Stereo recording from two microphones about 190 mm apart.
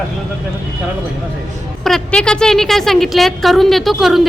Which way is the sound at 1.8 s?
5° left (ahead or behind).